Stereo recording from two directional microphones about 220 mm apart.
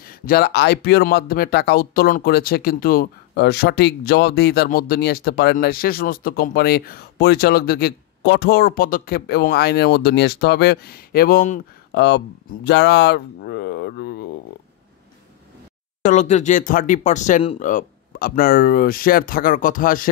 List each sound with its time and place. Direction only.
0.0 s speech: 40° left (ahead or behind)
11.9 s speech: 50° left (ahead or behind)
16.0 s speech: 35° left (ahead or behind)